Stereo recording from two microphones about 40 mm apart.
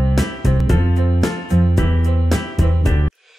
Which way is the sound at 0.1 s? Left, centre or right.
Centre.